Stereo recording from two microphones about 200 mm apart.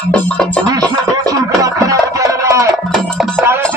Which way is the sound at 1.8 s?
15° right (ahead or behind).